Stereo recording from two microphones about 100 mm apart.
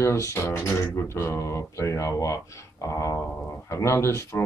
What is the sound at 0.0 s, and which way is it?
Speech, 30° left (ahead or behind).